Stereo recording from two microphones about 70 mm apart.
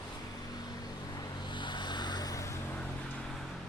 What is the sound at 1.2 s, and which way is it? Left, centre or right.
Vehicle, left.